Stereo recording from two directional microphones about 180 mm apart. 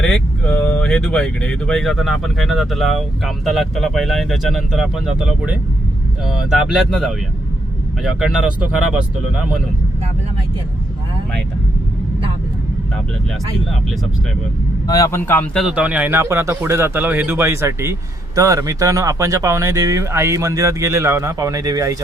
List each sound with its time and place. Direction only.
0.0 s speech: 5° left (ahead or behind)
14.8 s a man's voice: 20° left (ahead or behind)
15.6 s speech: 5° right (ahead or behind)